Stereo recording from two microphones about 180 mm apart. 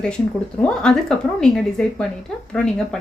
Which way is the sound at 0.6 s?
5° left (ahead or behind).